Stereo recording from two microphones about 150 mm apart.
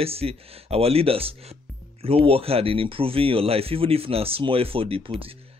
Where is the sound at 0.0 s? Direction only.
40° right (ahead or behind).